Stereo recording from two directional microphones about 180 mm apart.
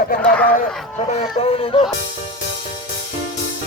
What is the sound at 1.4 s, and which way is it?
Music, 35° left (ahead or behind).